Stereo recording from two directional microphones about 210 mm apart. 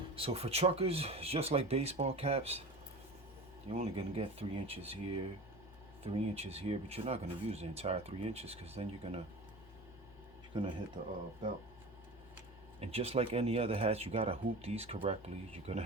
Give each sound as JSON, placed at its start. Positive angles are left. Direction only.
{"t": 0.2, "sound": "speech", "side_deg": -30}
{"t": 3.7, "sound": "speech", "side_deg": -30}
{"t": 10.5, "sound": "speech", "side_deg": -20}
{"t": 12.8, "sound": "speech", "side_deg": -30}